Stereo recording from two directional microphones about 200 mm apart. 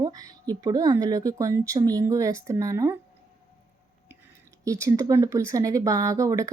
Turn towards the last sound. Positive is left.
turn(degrees=-15)  # may be behind; listen again after turning